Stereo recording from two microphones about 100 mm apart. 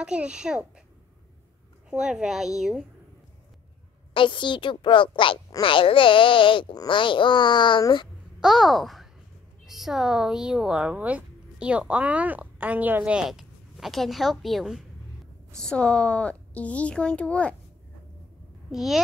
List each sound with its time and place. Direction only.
0.0 s a child's voice: 10° right (ahead or behind)
1.9 s speech: 10° right (ahead or behind)
4.1 s a woman's voice: 55° left (ahead or behind)
8.4 s speech: 5° right (ahead or behind)
15.6 s a child's voice: 10° left (ahead or behind)
18.7 s a child's voice: 5° right (ahead or behind)